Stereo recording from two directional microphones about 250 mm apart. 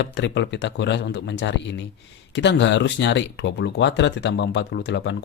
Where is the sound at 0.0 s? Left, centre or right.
Left.